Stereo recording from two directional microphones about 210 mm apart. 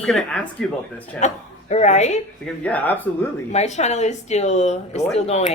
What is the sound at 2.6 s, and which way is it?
Speech, 10° left (ahead or behind).